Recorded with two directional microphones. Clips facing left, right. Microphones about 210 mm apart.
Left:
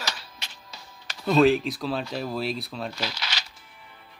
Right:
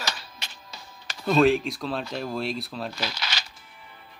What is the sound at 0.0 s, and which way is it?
Music, 50° right (ahead or behind).